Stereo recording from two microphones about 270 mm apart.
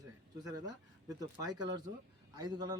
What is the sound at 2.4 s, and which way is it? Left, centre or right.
Speech, centre.